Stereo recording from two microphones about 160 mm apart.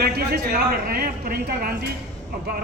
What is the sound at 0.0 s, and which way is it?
A man's voice, 80° right.